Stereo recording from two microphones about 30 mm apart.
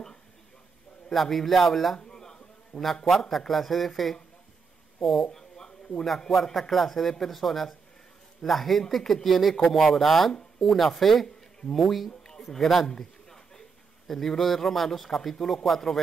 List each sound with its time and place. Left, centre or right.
1.1 s speech: centre
2.0 s a sound: left
2.7 s a man's voice: left
3.2 s speech: centre
5.3 s a sound: left
6.3 s speech: centre
12.2 s a sound: centre
12.5 s speech: centre
12.8 s a man's voice: left